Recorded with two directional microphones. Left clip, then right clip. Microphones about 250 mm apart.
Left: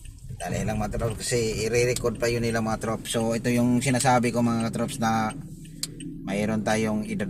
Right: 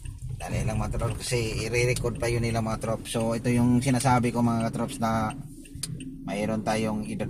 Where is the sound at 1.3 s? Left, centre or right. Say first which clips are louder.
Left 4 dB; centre.